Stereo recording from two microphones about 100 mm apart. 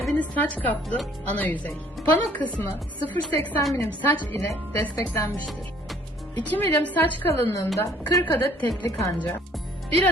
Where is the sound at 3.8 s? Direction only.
15° left (ahead or behind).